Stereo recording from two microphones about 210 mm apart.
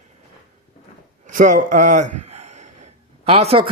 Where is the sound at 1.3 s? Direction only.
40° right (ahead or behind).